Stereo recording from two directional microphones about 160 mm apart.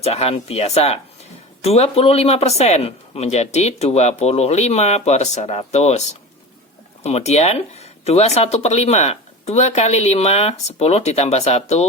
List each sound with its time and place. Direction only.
0.0 s speech: 40° left (ahead or behind)